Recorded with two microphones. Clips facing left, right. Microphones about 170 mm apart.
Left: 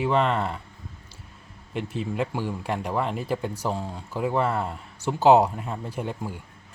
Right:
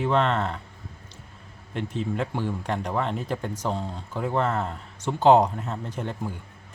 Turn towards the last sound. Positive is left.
turn(degrees=5)  # may be behind; listen again after turning